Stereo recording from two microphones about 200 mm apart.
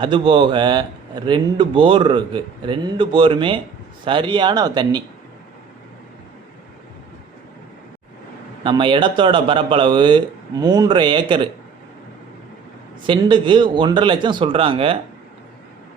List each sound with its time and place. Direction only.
0.0 s speech: 25° right (ahead or behind)
8.6 s speech: 25° right (ahead or behind)
13.1 s speech: 25° right (ahead or behind)